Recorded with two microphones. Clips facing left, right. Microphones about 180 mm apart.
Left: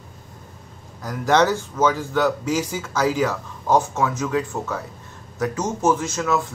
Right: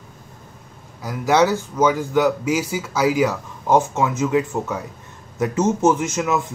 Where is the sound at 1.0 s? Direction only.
10° right (ahead or behind).